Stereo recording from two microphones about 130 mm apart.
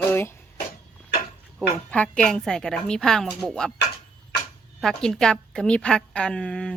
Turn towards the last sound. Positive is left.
turn(degrees=5)  # may be behind; listen again after turning